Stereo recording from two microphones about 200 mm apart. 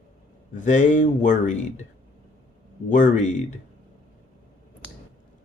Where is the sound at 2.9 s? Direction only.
40° left (ahead or behind).